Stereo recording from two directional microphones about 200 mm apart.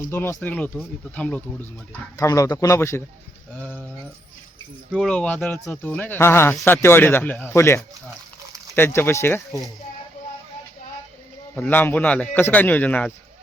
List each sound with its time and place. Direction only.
0.1 s speech: 10° left (ahead or behind)
4.9 s speech: 5° left (ahead or behind)
11.5 s speech: 10° left (ahead or behind)